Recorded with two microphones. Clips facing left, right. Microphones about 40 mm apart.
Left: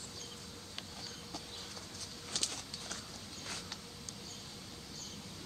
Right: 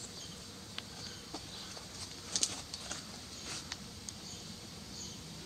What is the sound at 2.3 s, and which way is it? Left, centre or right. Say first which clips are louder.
Horse: even; left.